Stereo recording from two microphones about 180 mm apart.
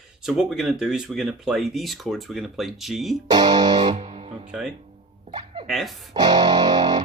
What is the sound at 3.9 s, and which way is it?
Speech, 35° right (ahead or behind).